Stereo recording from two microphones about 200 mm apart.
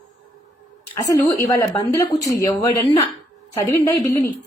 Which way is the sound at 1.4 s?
15° left (ahead or behind).